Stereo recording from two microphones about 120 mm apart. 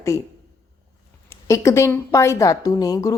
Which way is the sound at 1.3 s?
25° left (ahead or behind).